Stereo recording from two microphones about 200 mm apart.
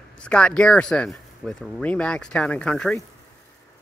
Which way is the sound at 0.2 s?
5° left (ahead or behind).